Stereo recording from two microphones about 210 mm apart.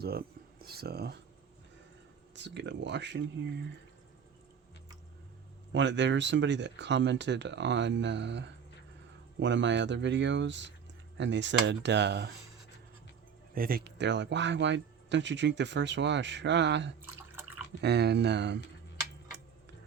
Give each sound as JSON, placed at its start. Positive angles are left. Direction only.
{"t": 0.0, "sound": "speech", "side_deg": -45}
{"t": 2.3, "sound": "speech", "side_deg": -55}
{"t": 5.7, "sound": "speech", "side_deg": -60}
{"t": 13.5, "sound": "speech", "side_deg": -45}